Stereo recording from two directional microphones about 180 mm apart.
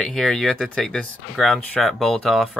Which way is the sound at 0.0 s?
5° left (ahead or behind).